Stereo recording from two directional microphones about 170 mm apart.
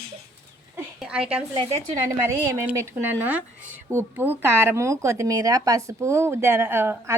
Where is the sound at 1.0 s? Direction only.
5° right (ahead or behind).